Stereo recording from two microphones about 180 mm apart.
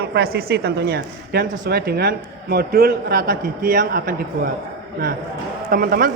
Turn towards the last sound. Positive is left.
turn(degrees=-55)  # may be behind; listen again after turning